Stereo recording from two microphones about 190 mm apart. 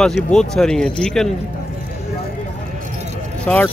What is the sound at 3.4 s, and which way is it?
Speech, 10° left (ahead or behind).